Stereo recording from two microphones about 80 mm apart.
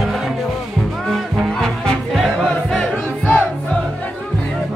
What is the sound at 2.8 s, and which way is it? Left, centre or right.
Music, centre.